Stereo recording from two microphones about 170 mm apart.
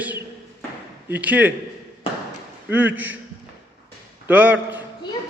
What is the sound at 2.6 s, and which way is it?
Speech, 10° right (ahead or behind).